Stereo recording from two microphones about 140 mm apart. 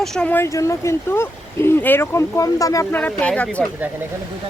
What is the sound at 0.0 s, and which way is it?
Speech, 5° left (ahead or behind).